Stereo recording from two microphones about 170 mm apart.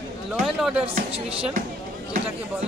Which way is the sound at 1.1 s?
35° right (ahead or behind).